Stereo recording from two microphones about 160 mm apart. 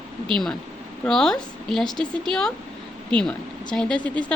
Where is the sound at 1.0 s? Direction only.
5° left (ahead or behind).